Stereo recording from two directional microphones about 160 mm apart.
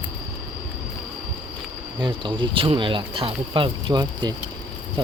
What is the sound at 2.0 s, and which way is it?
Speech, 30° right (ahead or behind).